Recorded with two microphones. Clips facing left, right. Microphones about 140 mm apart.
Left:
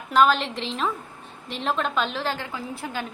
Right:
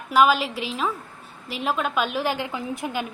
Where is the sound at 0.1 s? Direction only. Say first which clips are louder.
Right 1 dB; 10° right (ahead or behind).